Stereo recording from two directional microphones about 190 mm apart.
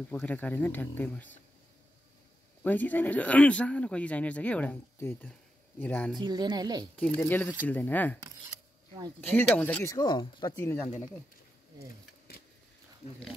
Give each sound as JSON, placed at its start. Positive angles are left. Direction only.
{"t": 0.1, "sound": "speech", "side_deg": 10}
{"t": 2.6, "sound": "speech", "side_deg": 10}
{"t": 6.1, "sound": "speech", "side_deg": -20}
{"t": 7.0, "sound": "speech", "side_deg": 10}
{"t": 9.2, "sound": "speech", "side_deg": 5}
{"t": 9.9, "sound": "speech", "side_deg": 20}